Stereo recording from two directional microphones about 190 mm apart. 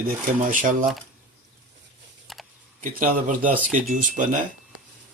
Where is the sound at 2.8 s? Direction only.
45° right (ahead or behind).